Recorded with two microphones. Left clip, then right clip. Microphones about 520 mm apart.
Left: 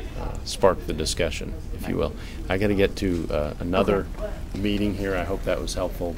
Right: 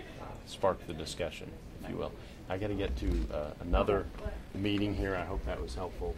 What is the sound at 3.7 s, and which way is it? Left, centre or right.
Speech, left.